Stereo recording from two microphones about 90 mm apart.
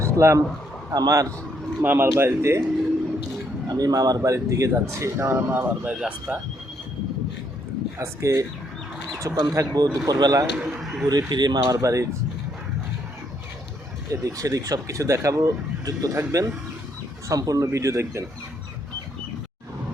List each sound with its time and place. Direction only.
0.0 s a man's voice: 30° right (ahead or behind)
0.9 s speech: 40° right (ahead or behind)
1.8 s speech: 20° right (ahead or behind)
3.7 s speech: 45° right (ahead or behind); by 6.4 s 15° right (ahead or behind)
7.9 s speech: 35° right (ahead or behind)
9.1 s bird: 40° right (ahead or behind)
9.5 s speech: 40° right (ahead or behind)
10.8 s speech: 5° right (ahead or behind)
11.1 s speech: 50° right (ahead or behind)
14.1 s speech: 40° right (ahead or behind)